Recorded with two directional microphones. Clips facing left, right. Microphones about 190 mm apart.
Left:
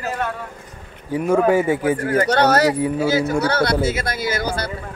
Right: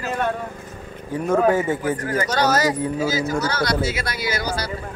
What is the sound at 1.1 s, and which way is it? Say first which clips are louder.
Speech: left 2 dB; 10° left (ahead or behind).